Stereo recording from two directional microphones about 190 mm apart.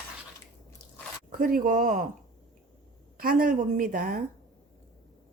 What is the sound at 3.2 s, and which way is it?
Speech, 50° right (ahead or behind).